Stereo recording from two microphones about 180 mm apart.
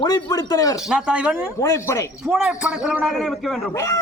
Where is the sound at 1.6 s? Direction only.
15° left (ahead or behind).